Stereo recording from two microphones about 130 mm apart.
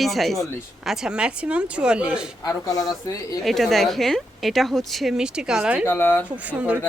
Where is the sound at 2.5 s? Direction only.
25° left (ahead or behind).